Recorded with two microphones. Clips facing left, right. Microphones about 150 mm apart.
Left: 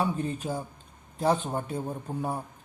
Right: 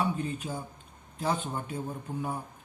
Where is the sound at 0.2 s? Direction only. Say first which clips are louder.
Left 3 dB; 35° left (ahead or behind).